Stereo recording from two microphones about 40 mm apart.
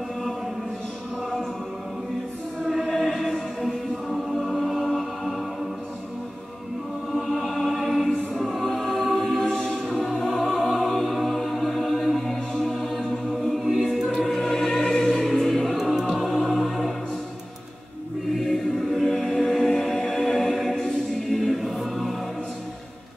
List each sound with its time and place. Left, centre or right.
2.9 s chant: centre
4.1 s choir: centre
7.2 s music: centre
18.3 s music: centre
21.3 s choir: centre